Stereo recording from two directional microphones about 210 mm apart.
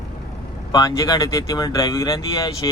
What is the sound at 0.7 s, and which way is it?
Speech, 15° left (ahead or behind).